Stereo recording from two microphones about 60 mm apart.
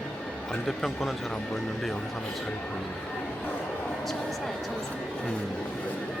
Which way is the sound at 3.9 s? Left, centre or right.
Centre.